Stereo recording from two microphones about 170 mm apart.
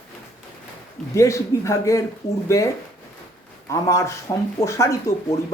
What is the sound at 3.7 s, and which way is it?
Speech, 20° left (ahead or behind).